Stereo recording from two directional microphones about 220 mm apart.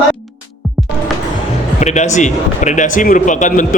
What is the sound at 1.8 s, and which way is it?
A man's voice, 30° left (ahead or behind).